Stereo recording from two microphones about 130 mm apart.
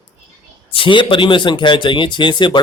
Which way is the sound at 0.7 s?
40° left (ahead or behind).